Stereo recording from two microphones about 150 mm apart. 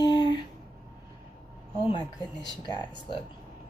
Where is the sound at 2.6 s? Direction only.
30° left (ahead or behind).